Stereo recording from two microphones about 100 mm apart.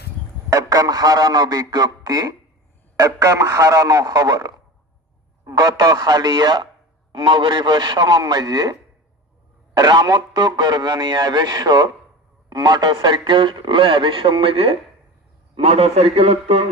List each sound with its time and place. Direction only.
0.5 s speech: 40° right (ahead or behind)
9.7 s a man's voice: 45° right (ahead or behind); by 14.8 s 70° right (ahead or behind)
15.5 s a man's voice: 90° right